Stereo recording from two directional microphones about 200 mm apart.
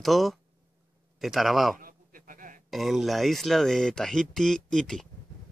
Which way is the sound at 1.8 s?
45° right (ahead or behind).